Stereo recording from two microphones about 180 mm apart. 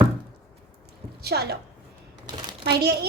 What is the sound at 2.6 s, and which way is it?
Speech, 65° right (ahead or behind).